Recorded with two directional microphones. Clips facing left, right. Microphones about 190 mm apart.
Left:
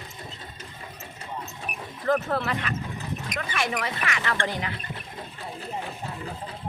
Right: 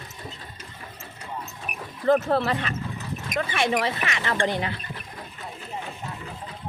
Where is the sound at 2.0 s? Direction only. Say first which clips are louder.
Right 4 dB; 30° right (ahead or behind).